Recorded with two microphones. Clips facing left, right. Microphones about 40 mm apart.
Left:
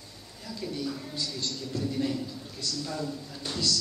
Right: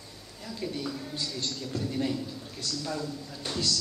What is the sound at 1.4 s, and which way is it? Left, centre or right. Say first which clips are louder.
Speech: even; right.